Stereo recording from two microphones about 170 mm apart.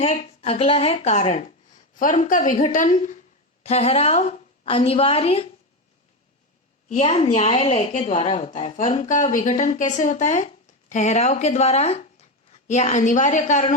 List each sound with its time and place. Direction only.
0.0 s a woman's voice: 35° left (ahead or behind)
6.8 s a woman's voice: 40° left (ahead or behind)